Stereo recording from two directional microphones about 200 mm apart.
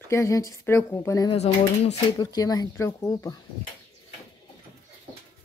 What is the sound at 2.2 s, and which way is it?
Speech, 20° left (ahead or behind).